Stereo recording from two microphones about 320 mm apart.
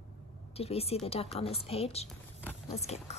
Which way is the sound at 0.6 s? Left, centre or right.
Centre.